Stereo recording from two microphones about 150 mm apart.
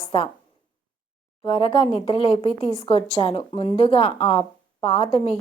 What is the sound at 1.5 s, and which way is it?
Speech, 35° left (ahead or behind).